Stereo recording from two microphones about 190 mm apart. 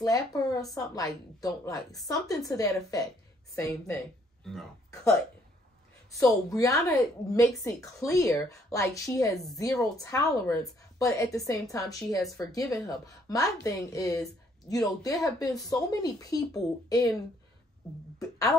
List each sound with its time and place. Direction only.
0.0 s a woman's voice: 20° left (ahead or behind)
6.5 s a woman's voice: 15° left (ahead or behind)